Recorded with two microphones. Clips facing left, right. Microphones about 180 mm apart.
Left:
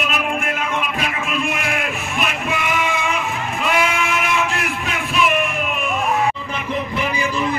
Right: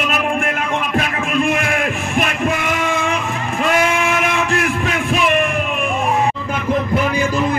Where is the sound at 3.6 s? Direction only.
50° right (ahead or behind).